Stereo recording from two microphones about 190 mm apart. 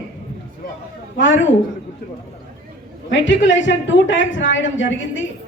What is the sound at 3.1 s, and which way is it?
A woman's voice, 70° left (ahead or behind).